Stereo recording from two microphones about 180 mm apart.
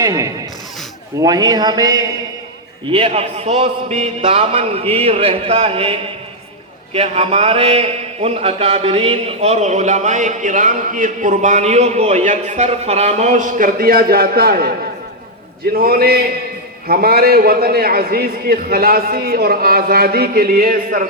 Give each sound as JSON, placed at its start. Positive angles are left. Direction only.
{"t": 0.0, "sound": "a man's voice", "side_deg": -20}
{"t": 2.9, "sound": "a man's voice", "side_deg": -35}
{"t": 15.7, "sound": "a man's voice", "side_deg": -55}